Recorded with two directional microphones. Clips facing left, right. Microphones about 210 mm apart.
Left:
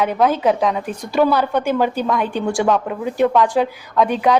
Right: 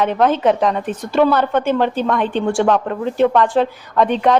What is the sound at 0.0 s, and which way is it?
A woman's voice, 5° left (ahead or behind).